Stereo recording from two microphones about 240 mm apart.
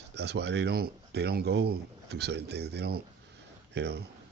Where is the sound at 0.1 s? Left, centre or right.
Right.